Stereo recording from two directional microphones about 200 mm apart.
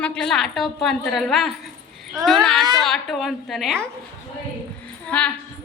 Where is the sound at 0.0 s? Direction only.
5° left (ahead or behind).